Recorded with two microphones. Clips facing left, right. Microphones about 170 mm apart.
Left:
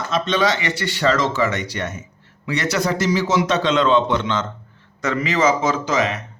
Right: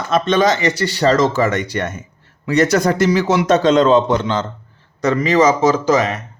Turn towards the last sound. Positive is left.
turn(degrees=-40)  # may be behind; listen again after turning